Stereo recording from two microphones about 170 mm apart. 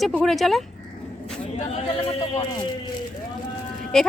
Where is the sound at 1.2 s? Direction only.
40° left (ahead or behind).